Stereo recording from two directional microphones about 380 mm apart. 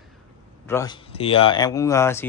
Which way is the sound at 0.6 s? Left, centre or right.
Centre.